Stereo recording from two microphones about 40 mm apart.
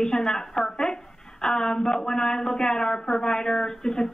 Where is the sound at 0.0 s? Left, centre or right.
Centre.